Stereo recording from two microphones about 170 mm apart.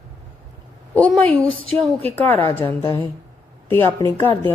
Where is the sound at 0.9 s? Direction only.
10° left (ahead or behind).